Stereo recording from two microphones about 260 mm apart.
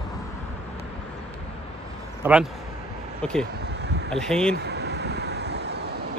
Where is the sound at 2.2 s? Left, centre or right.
Centre.